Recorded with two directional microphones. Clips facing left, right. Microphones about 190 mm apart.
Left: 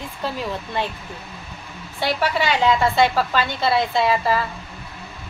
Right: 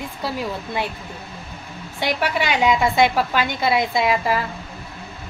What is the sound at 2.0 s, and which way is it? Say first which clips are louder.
A woman's voice: left 1 dB; 15° right (ahead or behind).